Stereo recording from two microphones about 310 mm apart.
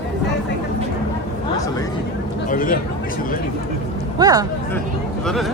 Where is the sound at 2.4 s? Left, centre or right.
Left.